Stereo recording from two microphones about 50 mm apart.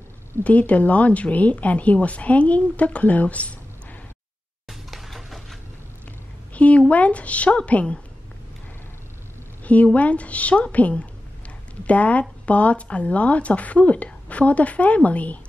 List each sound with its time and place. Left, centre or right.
0.4 s speech: left
4.6 s a sound: centre
6.5 s speech: left
9.9 s speech: left